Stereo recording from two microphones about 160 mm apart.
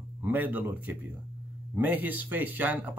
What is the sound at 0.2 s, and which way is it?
Speech, 10° right (ahead or behind).